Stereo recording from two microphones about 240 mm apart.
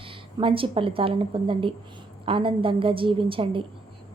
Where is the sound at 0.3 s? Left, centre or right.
Right.